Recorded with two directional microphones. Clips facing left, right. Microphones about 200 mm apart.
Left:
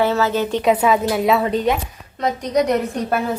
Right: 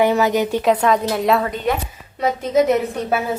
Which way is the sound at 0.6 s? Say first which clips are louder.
Left 3 dB; 5° left (ahead or behind).